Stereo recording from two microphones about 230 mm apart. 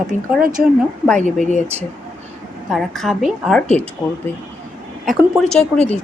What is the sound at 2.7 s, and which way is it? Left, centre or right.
Speech, centre.